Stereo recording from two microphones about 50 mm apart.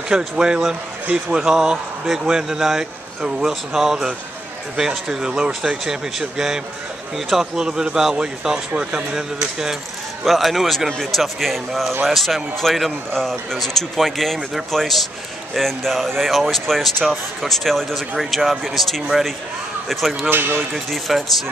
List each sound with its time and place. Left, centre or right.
0.1 s speech: centre
10.2 s speech: centre
20.2 s speech: right
20.7 s speech: centre